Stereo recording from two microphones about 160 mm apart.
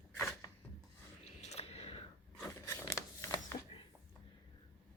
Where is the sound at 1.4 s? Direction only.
45° left (ahead or behind).